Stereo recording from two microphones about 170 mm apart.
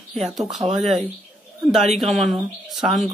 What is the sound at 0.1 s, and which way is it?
Speech, centre (ahead or behind).